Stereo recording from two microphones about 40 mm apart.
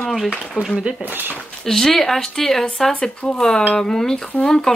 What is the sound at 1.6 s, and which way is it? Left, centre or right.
Speech, centre.